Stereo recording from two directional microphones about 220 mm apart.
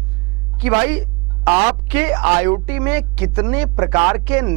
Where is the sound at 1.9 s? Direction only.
10° right (ahead or behind).